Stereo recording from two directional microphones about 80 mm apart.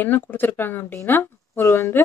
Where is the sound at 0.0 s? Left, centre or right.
Left.